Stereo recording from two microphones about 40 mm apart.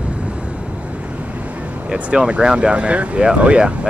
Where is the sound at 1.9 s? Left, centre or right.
Right.